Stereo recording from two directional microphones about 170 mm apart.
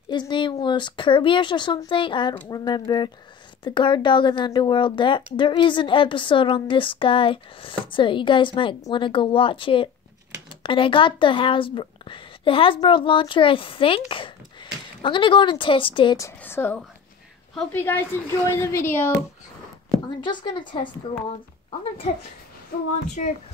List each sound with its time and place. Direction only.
0.1 s speech: 25° left (ahead or behind)
16.2 s a woman's voice: 15° left (ahead or behind)
20.2 s speech: 25° left (ahead or behind)
23.2 s speech: 50° left (ahead or behind)